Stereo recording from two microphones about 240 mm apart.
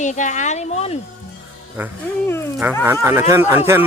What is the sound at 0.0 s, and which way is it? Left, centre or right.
Speech, left.